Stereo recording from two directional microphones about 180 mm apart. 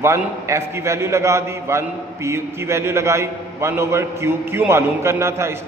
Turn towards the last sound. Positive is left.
turn(degrees=-15)  # may be behind; listen again after turning